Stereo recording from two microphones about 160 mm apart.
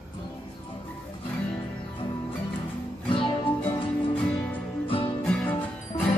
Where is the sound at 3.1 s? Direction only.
30° left (ahead or behind).